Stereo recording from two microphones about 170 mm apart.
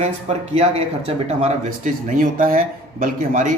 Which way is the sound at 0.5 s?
35° right (ahead or behind).